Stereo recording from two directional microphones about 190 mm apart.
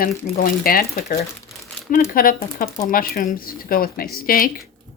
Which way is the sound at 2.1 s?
50° left (ahead or behind).